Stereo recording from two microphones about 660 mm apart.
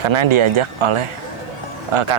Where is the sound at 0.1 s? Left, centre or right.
Right.